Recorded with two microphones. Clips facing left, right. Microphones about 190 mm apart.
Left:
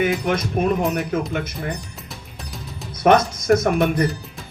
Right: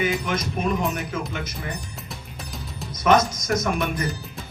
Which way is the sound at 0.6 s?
55° left (ahead or behind).